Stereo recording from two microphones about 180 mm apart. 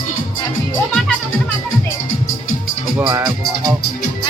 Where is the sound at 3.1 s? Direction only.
20° right (ahead or behind).